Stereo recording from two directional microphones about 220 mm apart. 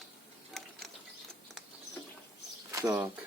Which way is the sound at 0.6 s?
Centre (ahead or behind).